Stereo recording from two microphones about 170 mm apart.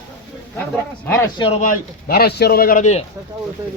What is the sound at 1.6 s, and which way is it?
Speech, 55° left (ahead or behind).